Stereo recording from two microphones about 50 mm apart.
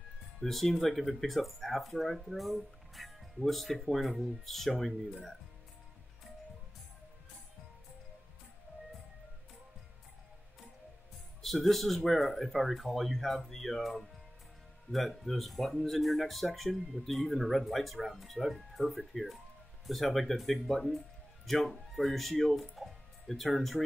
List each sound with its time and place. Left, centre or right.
0.4 s speech: centre
8.7 s music: right
11.4 s speech: centre